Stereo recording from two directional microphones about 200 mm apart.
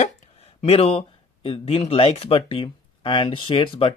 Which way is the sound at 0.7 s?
30° left (ahead or behind).